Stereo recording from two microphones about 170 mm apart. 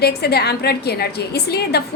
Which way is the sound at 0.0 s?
70° left (ahead or behind).